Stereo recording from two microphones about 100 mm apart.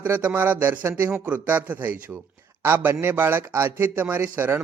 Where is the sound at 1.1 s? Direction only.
15° right (ahead or behind).